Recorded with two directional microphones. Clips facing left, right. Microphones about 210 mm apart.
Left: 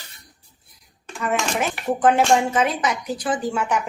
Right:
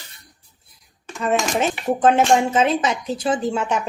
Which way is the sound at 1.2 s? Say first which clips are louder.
Right 3 dB; 25° right (ahead or behind).